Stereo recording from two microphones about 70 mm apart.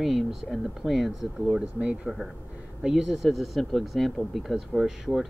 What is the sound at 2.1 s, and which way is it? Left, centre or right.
Speech, centre.